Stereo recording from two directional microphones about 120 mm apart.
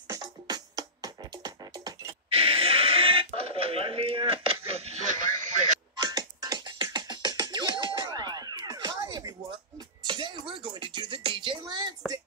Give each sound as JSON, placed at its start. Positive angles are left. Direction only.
{"t": 0.1, "sound": "music", "side_deg": -30}
{"t": 2.3, "sound": "a sound", "side_deg": -50}
{"t": 5.9, "sound": "music", "side_deg": -35}